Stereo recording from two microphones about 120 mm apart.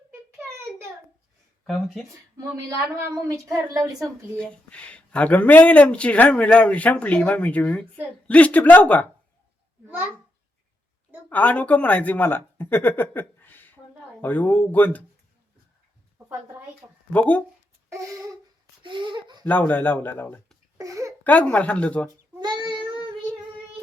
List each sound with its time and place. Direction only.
1.6 s speech: centre (ahead or behind)
2.6 s a woman's voice: 30° right (ahead or behind)
4.4 s speech: 10° left (ahead or behind)
11.3 s speech: 15° left (ahead or behind)
16.1 s a sound: 20° right (ahead or behind)
17.1 s speech: 10° left (ahead or behind)
17.8 s a sound: 25° right (ahead or behind)
18.8 s a sound: 40° right (ahead or behind)
19.5 s speech: 15° left (ahead or behind)
20.7 s speech: 25° right (ahead or behind)
21.2 s speech: 15° left (ahead or behind)
22.4 s child singing: 40° right (ahead or behind)